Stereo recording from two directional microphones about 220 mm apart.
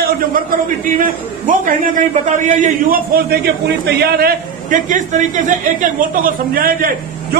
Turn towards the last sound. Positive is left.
turn(degrees=-40)  # may be behind; listen again after turning